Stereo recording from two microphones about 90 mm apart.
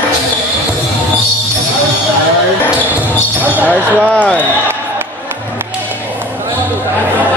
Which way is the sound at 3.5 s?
20° right (ahead or behind).